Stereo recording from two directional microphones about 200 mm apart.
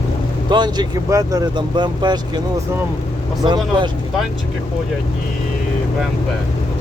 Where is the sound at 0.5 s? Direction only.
20° right (ahead or behind).